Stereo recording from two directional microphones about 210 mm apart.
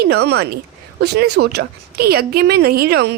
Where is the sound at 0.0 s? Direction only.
50° right (ahead or behind).